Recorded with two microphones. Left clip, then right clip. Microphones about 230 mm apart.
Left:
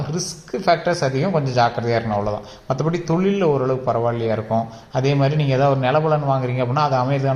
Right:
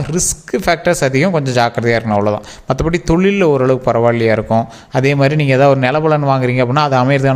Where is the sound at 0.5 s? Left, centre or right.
Right.